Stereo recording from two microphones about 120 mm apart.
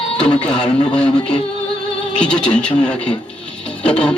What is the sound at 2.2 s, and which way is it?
Music, 10° left (ahead or behind).